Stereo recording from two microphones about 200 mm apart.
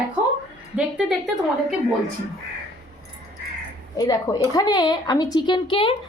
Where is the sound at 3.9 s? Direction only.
20° left (ahead or behind).